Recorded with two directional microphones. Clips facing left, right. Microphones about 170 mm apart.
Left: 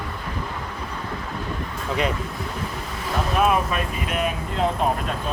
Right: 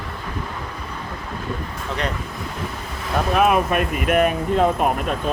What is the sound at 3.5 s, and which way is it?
Speech, 60° right (ahead or behind).